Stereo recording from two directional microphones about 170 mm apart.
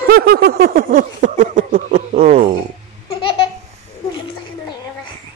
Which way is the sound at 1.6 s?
40° right (ahead or behind).